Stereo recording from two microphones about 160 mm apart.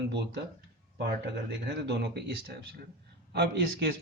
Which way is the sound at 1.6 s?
90° right.